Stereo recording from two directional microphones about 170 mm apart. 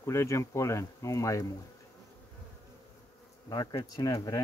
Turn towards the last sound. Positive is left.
turn(degrees=20)  # may be behind; listen again after turning